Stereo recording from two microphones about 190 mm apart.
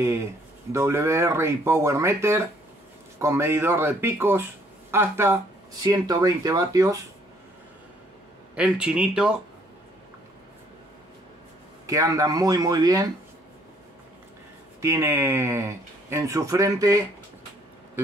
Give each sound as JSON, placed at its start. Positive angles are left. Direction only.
{"t": 0.7, "sound": "speech", "side_deg": -15}
{"t": 8.5, "sound": "speech", "side_deg": -5}
{"t": 11.8, "sound": "speech", "side_deg": -15}
{"t": 14.8, "sound": "speech", "side_deg": -15}